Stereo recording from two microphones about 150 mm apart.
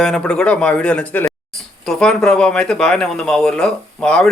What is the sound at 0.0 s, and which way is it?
Speech, 5° left (ahead or behind).